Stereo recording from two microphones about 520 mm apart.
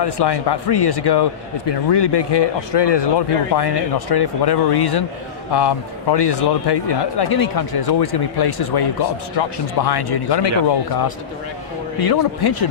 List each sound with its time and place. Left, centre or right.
0.0 s a man's voice: left
11.9 s speech: left